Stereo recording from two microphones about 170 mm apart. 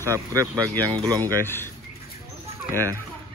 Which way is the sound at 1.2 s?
15° left (ahead or behind).